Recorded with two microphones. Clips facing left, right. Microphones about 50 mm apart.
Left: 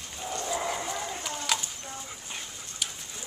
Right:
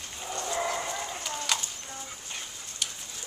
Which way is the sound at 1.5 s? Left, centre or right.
Centre.